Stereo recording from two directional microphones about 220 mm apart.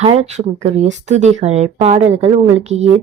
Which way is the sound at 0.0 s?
30° right (ahead or behind).